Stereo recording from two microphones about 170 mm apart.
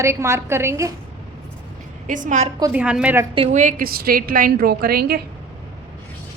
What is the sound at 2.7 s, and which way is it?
Speech, 5° right (ahead or behind).